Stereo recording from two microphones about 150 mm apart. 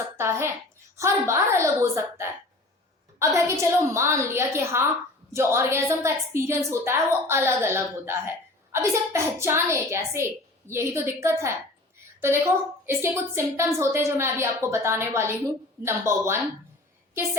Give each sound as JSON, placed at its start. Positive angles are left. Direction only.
{"t": 0.2, "sound": "a woman's voice", "side_deg": -15}